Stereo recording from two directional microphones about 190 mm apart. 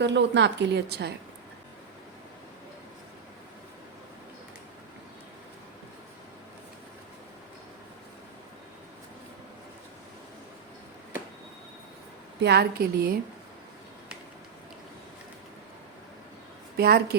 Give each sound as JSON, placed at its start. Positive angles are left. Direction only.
{"t": 0.0, "sound": "a woman's voice", "side_deg": -65}
{"t": 12.4, "sound": "a woman's voice", "side_deg": -60}
{"t": 16.7, "sound": "a woman's voice", "side_deg": -55}